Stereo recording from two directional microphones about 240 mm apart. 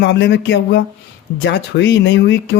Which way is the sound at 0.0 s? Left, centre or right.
Left.